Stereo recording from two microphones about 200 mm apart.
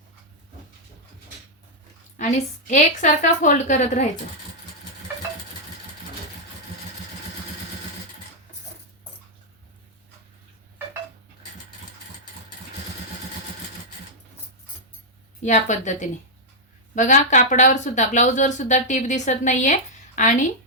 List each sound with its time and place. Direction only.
2.1 s speech: 35° left (ahead or behind)
15.4 s speech: 35° left (ahead or behind)